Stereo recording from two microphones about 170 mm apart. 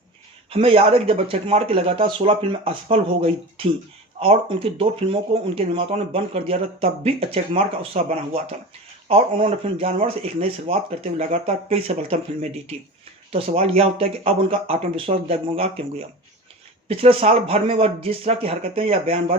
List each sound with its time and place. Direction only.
0.5 s speech: 35° right (ahead or behind)
16.9 s speech: 35° right (ahead or behind)